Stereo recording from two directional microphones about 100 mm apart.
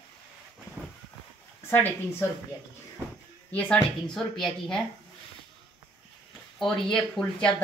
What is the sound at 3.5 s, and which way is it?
Speech, 15° left (ahead or behind).